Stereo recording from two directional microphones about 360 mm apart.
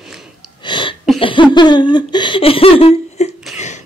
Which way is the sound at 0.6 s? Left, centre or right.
Centre.